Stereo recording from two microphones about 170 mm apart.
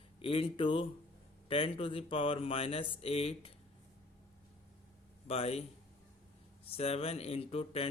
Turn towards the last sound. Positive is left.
turn(degrees=35)  # may be behind; listen again after turning